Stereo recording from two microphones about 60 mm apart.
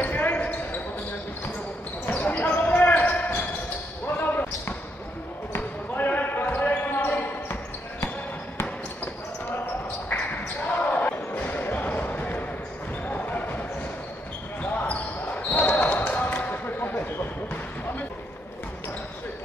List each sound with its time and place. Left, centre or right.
0.0 s basketball bounce: left
2.0 s basketball bounce: left
10.8 s basketball bounce: left